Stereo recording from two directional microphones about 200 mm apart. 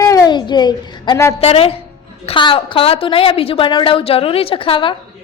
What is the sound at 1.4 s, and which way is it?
A woman's voice, 30° left (ahead or behind).